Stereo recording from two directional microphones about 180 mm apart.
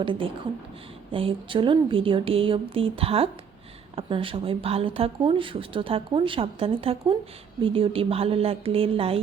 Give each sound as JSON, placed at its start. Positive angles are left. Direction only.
{"t": 0.0, "sound": "a woman's voice", "side_deg": -30}